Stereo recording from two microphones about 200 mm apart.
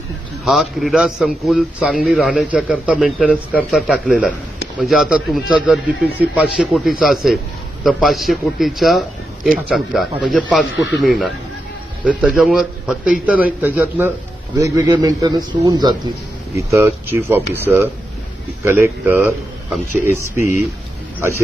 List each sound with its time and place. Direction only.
0.4 s a man's voice: centre (ahead or behind)